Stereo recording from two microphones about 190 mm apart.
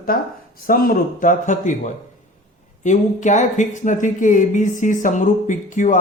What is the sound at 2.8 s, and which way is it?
Speech, 40° left (ahead or behind).